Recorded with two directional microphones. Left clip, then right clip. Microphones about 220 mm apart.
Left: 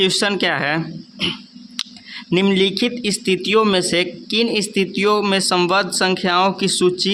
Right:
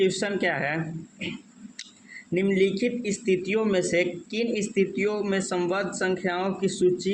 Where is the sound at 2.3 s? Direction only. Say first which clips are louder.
Left 7 dB; 40° left (ahead or behind).